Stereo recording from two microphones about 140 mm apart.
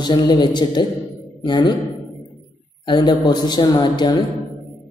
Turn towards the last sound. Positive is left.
turn(degrees=30)  # may be behind; listen again after turning